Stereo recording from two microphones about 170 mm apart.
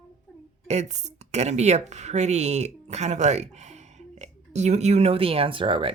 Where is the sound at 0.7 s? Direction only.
40° right (ahead or behind).